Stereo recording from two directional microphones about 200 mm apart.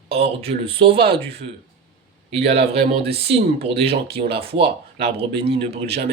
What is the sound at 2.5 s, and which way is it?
Speech, 30° right (ahead or behind).